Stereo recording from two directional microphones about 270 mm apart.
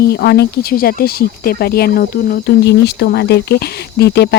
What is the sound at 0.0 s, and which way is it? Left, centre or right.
Speech, left.